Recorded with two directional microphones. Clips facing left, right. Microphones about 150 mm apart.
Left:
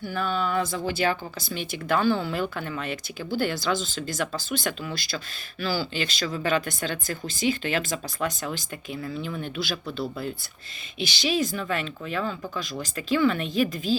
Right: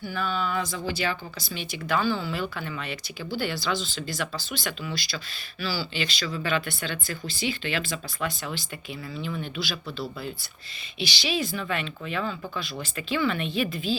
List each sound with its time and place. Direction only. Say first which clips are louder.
0.0 s speech: left 2 dB; 50° left (ahead or behind)
11.0 s speech: left 3 dB; 45° left (ahead or behind)